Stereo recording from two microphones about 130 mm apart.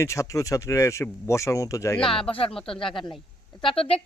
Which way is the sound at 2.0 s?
45° left (ahead or behind).